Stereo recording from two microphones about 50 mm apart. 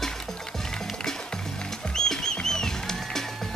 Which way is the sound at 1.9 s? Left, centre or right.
Centre.